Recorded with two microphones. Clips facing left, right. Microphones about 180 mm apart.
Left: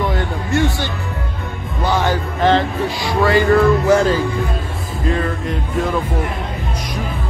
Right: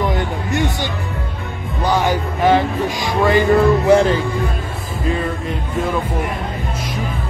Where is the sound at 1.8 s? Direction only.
15° right (ahead or behind).